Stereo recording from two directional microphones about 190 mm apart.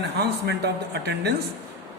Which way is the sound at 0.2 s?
60° right (ahead or behind).